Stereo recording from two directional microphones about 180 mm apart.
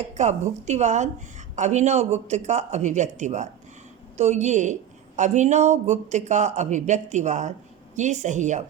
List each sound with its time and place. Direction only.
0.1 s a woman's voice: 40° right (ahead or behind)